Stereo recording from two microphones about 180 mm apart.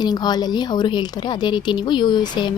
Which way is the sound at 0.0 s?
20° left (ahead or behind).